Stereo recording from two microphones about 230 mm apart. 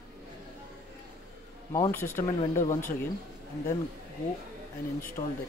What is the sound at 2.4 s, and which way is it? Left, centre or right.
Speech, left.